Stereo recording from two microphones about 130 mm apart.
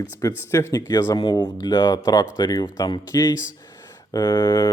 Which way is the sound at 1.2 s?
35° left (ahead or behind).